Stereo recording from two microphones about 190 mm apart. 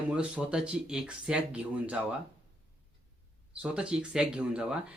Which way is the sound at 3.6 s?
5° right (ahead or behind).